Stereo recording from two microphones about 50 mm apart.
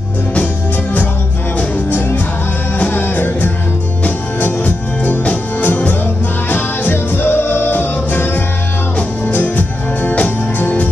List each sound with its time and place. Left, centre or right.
1.6 s music: left